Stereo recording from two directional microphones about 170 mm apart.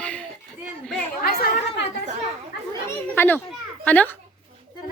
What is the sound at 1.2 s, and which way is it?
Speech, 65° left (ahead or behind).